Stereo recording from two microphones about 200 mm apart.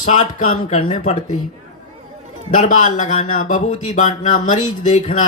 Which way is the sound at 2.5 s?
40° left (ahead or behind).